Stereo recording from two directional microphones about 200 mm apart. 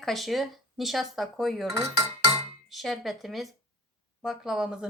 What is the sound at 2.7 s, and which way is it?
Speech, centre (ahead or behind).